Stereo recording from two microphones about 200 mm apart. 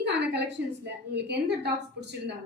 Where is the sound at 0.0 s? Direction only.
60° right (ahead or behind).